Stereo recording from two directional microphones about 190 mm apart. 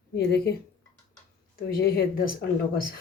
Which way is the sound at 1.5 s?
55° left (ahead or behind).